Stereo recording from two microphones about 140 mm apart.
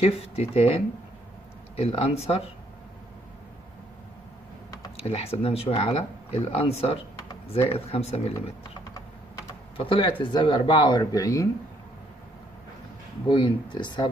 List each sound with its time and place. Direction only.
0.0 s speech: 45° left (ahead or behind)
4.9 s speech: 45° left (ahead or behind)
9.8 s speech: 35° left (ahead or behind)
13.3 s speech: 35° left (ahead or behind)